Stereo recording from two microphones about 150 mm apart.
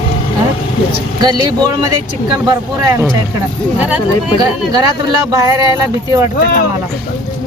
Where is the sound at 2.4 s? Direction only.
25° right (ahead or behind).